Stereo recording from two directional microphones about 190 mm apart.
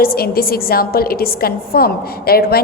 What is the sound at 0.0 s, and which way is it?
A woman's voice, 50° left (ahead or behind).